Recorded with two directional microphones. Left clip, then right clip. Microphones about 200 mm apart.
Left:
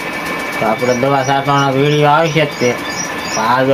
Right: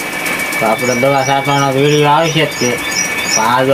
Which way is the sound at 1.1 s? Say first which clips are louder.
Right 1 dB; 10° left (ahead or behind).